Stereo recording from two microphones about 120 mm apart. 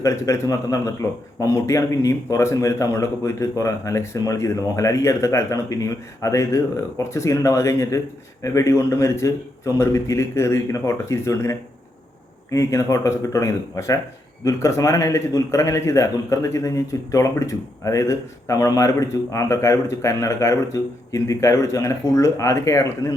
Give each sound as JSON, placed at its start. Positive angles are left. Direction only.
{"t": 0.0, "sound": "a man's voice", "side_deg": 25}